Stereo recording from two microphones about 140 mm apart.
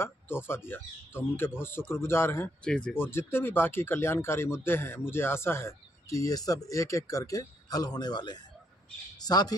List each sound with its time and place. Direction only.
0.0 s speech: 15° left (ahead or behind)
2.6 s a man's voice: 5° left (ahead or behind); by 9.6 s 30° left (ahead or behind)